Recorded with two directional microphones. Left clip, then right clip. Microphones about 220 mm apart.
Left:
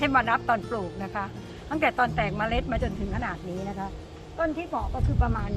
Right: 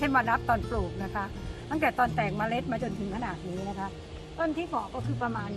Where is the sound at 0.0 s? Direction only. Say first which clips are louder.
Left 3 dB; 5° left (ahead or behind).